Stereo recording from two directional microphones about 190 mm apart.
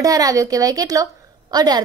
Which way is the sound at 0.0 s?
20° right (ahead or behind).